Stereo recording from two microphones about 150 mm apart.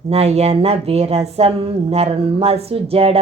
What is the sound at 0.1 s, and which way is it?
Speech, 45° right (ahead or behind).